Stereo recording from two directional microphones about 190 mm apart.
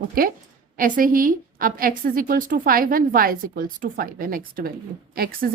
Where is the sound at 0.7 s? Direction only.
45° right (ahead or behind).